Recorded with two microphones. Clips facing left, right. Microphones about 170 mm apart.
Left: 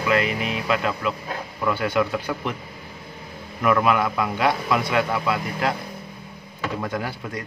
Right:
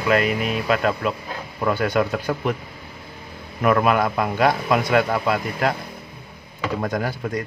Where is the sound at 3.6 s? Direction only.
45° right (ahead or behind).